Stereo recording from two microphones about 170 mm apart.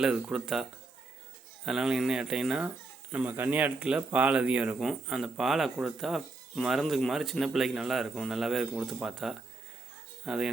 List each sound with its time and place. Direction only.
0.0 s speech: 5° right (ahead or behind)